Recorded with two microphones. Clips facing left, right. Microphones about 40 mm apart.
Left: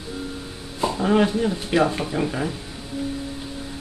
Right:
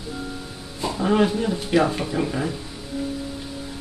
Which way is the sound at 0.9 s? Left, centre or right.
Centre.